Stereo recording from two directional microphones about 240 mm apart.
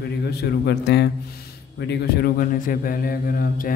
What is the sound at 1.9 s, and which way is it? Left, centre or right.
A man's voice, left.